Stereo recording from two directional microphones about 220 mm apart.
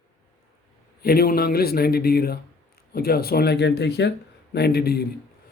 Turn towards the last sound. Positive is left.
turn(degrees=45)  # may be behind; listen again after turning